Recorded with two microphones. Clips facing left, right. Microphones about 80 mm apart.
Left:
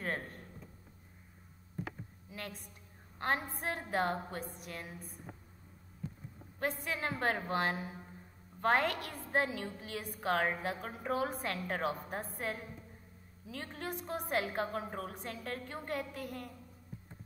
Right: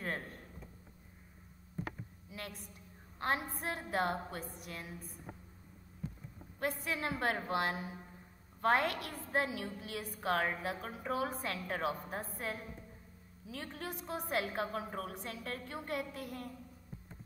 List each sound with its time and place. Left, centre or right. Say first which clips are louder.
0.0 s a sound: left 2 dB; left
3.6 s a woman's voice: left 1 dB; left
6.8 s a woman's voice: even; left